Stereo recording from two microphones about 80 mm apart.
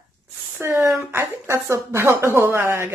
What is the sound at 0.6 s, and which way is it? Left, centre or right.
Speech, right.